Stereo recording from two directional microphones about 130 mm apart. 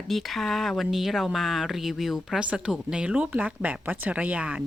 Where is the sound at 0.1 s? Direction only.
Centre (ahead or behind).